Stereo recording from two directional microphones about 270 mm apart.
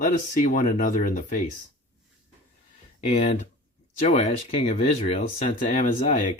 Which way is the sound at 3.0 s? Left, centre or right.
Left.